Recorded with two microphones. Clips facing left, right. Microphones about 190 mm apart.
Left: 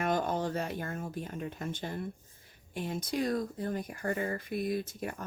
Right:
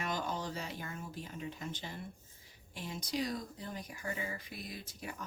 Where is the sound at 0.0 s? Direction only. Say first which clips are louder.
Left 8 dB; 55° left (ahead or behind).